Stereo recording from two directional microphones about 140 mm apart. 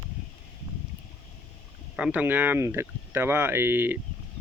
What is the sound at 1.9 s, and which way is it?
Speech, 10° right (ahead or behind).